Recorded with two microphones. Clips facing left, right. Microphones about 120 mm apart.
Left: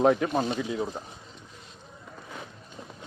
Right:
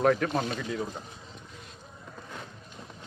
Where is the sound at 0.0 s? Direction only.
15° left (ahead or behind).